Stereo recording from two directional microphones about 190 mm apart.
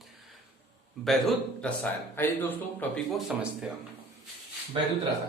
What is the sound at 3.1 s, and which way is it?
Speech, 5° right (ahead or behind).